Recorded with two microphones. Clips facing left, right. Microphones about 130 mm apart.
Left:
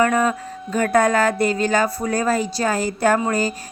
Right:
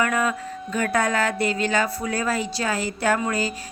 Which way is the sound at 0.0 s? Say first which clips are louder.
Left 5 dB; 40° left (ahead or behind).